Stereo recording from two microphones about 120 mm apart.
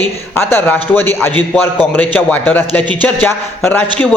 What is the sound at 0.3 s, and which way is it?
A man's voice, 15° left (ahead or behind).